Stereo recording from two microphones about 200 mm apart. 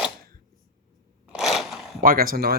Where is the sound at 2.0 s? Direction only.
45° right (ahead or behind).